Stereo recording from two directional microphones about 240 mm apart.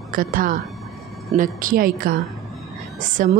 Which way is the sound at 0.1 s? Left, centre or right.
Right.